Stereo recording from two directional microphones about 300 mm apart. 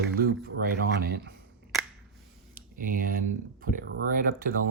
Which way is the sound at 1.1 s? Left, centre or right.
Right.